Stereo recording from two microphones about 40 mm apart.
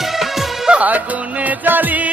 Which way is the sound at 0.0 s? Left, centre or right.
Centre.